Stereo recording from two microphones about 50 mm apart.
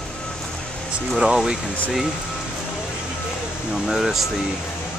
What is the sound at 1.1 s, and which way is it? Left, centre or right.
Speech, centre.